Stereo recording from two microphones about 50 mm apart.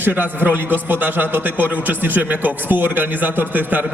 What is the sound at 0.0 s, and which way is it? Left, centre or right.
A man's voice, right.